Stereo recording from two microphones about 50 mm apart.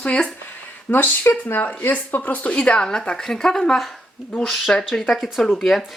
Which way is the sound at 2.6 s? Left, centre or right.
Centre.